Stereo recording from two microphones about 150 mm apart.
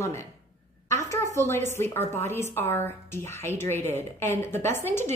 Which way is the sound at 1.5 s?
15° left (ahead or behind).